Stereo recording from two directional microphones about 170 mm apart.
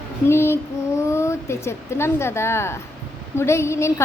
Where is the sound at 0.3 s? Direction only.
15° left (ahead or behind).